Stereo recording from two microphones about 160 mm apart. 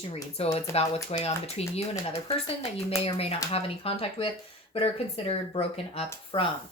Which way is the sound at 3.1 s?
40° left (ahead or behind).